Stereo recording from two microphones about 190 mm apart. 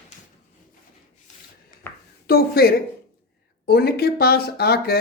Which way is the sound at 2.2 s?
55° left (ahead or behind).